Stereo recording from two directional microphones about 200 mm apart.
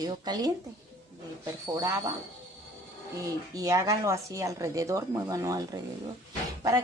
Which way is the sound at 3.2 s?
15° right (ahead or behind).